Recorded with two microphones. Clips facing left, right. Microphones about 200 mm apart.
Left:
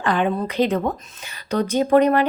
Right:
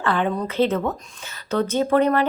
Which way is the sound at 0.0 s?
15° left (ahead or behind).